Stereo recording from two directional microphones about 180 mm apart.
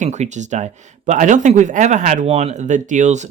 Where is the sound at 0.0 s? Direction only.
40° right (ahead or behind).